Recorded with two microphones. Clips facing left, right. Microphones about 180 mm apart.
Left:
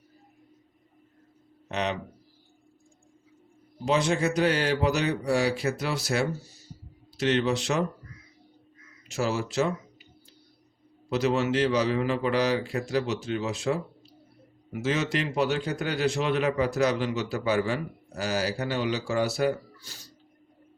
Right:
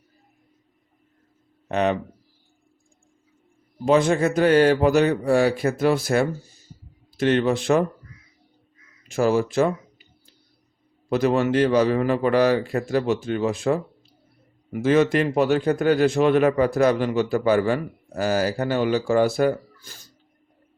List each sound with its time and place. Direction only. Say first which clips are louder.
1.6 s speech: right 8 dB; 50° right (ahead or behind)
3.8 s a man's voice: right 6 dB; 50° right (ahead or behind)
9.0 s a man's voice: right 8 dB; 50° right (ahead or behind)
11.1 s a man's voice: right 5 dB; 55° right (ahead or behind)